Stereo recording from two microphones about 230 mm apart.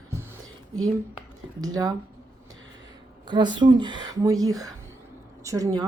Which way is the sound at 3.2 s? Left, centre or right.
Centre.